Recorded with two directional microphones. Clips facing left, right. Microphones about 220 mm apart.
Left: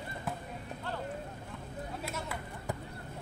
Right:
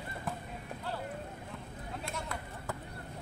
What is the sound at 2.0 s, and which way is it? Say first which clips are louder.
Run: right 1 dB; 5° left (ahead or behind).